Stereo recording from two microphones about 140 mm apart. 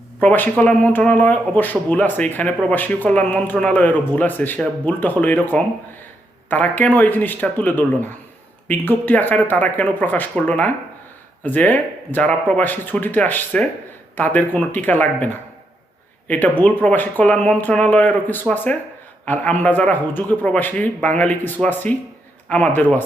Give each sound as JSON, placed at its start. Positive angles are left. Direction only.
{"t": 0.2, "sound": "speech", "side_deg": 10}